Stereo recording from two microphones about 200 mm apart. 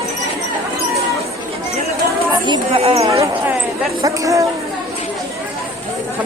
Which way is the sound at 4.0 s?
15° right (ahead or behind).